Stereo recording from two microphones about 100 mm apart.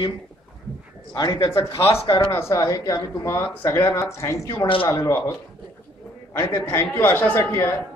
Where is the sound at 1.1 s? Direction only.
40° left (ahead or behind).